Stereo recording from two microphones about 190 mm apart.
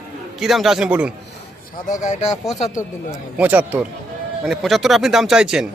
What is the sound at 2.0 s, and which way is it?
Speech, 40° left (ahead or behind).